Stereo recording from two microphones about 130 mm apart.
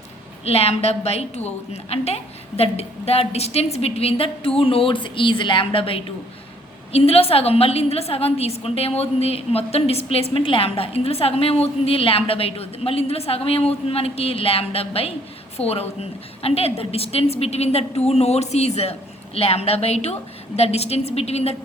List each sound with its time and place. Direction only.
0.4 s a woman's voice: 50° left (ahead or behind)